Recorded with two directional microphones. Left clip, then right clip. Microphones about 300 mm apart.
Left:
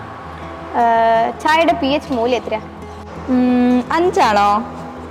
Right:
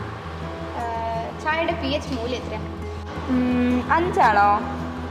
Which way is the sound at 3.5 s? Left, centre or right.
Left.